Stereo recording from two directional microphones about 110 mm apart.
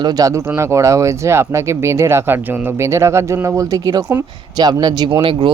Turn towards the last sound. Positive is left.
turn(degrees=-35)  # may be behind; listen again after turning